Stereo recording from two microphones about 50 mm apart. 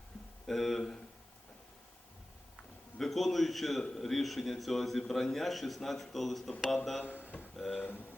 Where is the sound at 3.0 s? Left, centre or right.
Centre.